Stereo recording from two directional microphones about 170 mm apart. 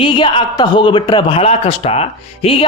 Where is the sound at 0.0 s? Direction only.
30° left (ahead or behind).